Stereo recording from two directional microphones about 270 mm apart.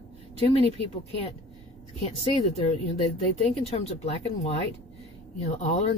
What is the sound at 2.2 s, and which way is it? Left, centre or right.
Speech, left.